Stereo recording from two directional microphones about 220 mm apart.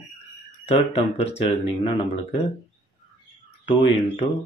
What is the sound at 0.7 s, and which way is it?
Speech, 25° left (ahead or behind).